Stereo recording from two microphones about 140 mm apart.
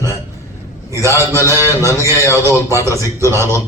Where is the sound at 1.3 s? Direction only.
20° left (ahead or behind).